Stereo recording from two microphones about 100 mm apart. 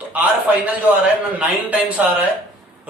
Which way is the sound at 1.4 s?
15° right (ahead or behind).